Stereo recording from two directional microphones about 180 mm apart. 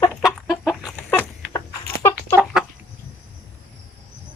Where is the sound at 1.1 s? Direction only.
10° left (ahead or behind).